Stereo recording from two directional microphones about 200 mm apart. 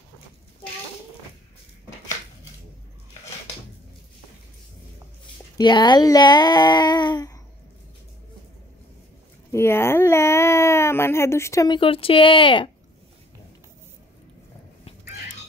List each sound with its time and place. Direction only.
5.6 s speech: 20° left (ahead or behind)
9.5 s speech: 10° left (ahead or behind)